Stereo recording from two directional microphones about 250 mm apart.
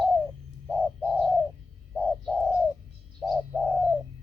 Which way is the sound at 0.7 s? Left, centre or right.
Centre.